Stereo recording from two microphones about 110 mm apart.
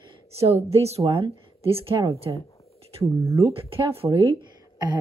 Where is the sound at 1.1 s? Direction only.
50° right (ahead or behind).